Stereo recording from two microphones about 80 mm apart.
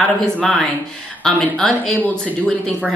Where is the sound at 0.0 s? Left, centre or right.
Centre.